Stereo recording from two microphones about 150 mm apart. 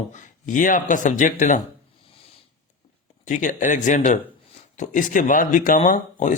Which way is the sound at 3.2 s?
55° left (ahead or behind).